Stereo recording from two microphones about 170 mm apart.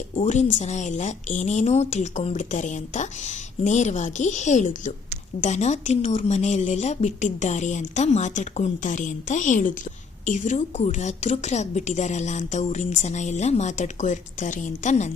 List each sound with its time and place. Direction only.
0.2 s a woman's voice: 45° left (ahead or behind)